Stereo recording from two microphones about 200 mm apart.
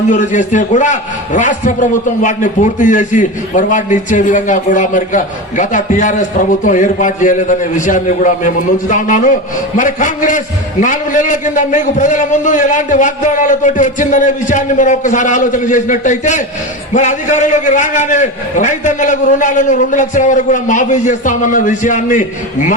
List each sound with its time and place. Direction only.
0.1 s a man's voice: 40° left (ahead or behind)